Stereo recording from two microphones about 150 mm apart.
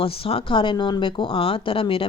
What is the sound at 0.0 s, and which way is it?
Speech, 40° left (ahead or behind).